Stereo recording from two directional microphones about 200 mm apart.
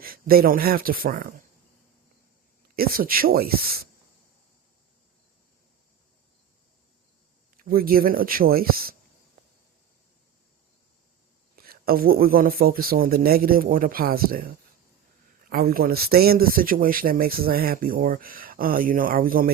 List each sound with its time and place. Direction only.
0.0 s speech: 45° right (ahead or behind)
2.7 s speech: 45° right (ahead or behind)
7.5 s speech: 45° right (ahead or behind)
11.5 s speech: 50° right (ahead or behind)